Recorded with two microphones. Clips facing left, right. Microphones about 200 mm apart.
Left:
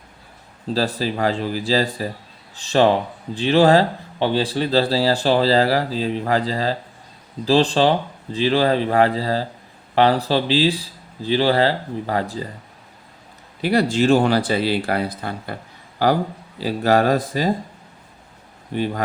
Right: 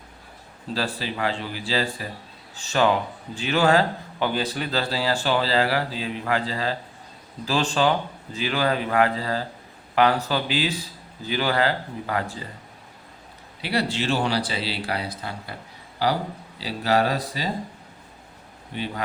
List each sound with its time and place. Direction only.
0.7 s speech: 40° left (ahead or behind)
13.6 s speech: 45° left (ahead or behind)
18.7 s speech: 45° left (ahead or behind)